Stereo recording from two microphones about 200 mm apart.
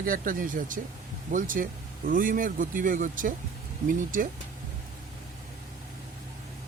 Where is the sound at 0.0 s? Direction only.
45° right (ahead or behind).